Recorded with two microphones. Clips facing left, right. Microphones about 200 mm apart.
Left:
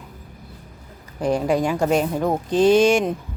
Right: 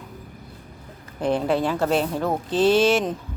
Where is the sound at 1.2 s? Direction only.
10° left (ahead or behind).